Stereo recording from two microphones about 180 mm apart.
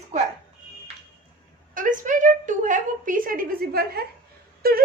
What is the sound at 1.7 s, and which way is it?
A woman's voice, 45° right (ahead or behind).